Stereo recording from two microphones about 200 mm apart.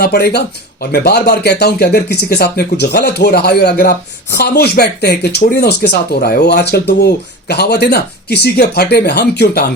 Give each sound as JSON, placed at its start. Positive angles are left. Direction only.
{"t": 0.0, "sound": "speech", "side_deg": 55}